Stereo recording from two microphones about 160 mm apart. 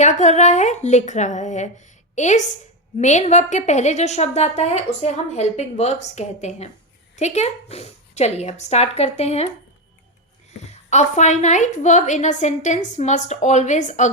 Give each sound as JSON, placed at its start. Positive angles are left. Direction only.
{"t": 0.0, "sound": "a woman's voice", "side_deg": 45}
{"t": 10.6, "sound": "a woman's voice", "side_deg": 45}